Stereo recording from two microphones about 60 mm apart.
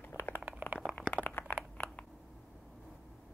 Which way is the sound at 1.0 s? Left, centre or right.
Left.